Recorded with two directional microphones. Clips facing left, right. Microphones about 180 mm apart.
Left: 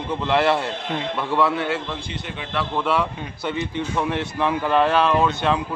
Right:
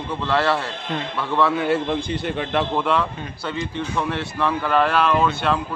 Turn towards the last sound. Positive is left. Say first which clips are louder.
# even
turn(degrees=15)  # may be behind; listen again after turning